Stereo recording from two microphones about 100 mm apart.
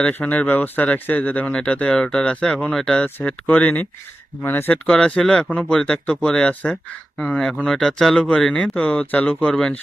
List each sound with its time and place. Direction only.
0.0 s speech: 15° left (ahead or behind)
4.9 s speech: 10° left (ahead or behind)